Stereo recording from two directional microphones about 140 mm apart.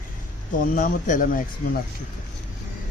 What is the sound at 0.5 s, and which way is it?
Speech, 70° left (ahead or behind).